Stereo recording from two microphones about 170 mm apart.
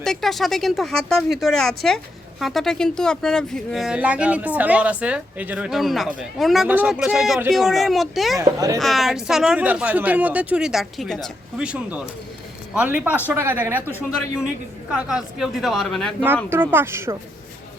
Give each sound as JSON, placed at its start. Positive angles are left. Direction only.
{"t": 0.0, "sound": "speech", "side_deg": 0}
{"t": 8.4, "sound": "speech", "side_deg": -20}
{"t": 8.8, "sound": "speech", "side_deg": 0}
{"t": 16.5, "sound": "speech", "side_deg": -15}